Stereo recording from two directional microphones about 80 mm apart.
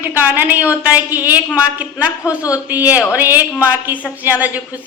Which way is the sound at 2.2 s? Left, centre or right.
Left.